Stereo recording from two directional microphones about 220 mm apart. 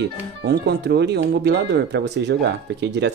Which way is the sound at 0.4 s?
50° right (ahead or behind).